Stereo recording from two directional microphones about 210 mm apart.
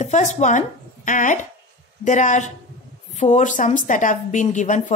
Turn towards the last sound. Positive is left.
turn(degrees=35)  # may be behind; listen again after turning